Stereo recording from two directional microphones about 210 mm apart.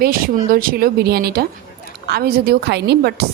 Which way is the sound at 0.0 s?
45° right (ahead or behind).